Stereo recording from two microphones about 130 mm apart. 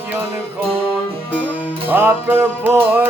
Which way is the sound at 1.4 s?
15° right (ahead or behind).